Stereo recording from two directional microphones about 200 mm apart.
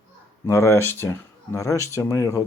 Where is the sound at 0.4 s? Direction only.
15° left (ahead or behind).